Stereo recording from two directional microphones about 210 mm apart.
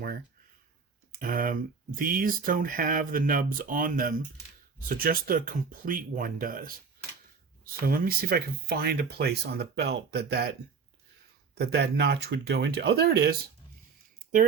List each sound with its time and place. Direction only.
1.1 s speech: 40° right (ahead or behind)
11.5 s speech: 50° right (ahead or behind)